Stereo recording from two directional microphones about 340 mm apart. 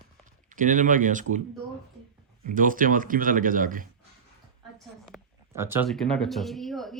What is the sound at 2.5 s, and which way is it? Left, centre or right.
Speech, right.